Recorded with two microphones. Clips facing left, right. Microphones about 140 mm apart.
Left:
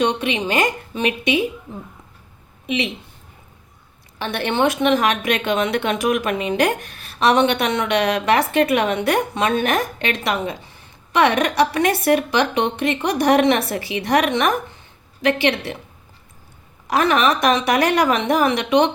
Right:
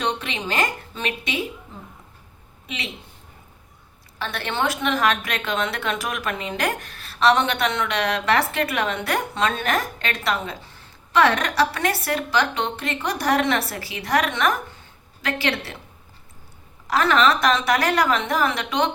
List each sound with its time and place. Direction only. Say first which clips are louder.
0.0 s a woman's voice: left 6 dB; 15° left (ahead or behind)
2.6 s speech: left 11 dB; 20° left (ahead or behind)
4.2 s a woman's voice: left 6 dB; 20° left (ahead or behind)
16.9 s a woman's voice: left 1 dB; 15° left (ahead or behind)